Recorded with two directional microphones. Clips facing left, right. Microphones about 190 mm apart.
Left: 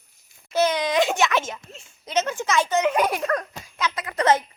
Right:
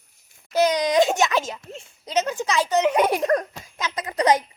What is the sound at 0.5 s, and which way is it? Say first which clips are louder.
Speech: right 2 dB; 15° right (ahead or behind).